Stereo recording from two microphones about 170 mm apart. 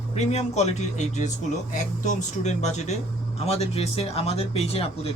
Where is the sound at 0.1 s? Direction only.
40° left (ahead or behind).